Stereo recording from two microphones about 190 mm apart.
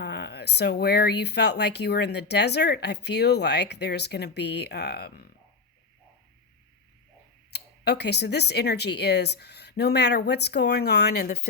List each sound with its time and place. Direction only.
0.0 s speech: 65° left (ahead or behind)
7.5 s speech: 60° left (ahead or behind)